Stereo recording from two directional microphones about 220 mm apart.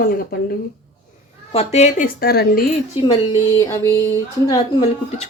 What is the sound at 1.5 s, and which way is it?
Speech, 30° left (ahead or behind).